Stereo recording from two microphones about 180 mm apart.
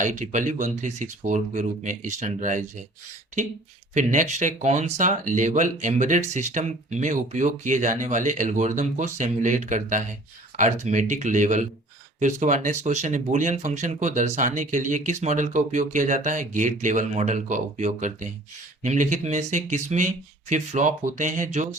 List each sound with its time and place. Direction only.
0.0 s speech: 45° right (ahead or behind)
3.9 s speech: 45° right (ahead or behind)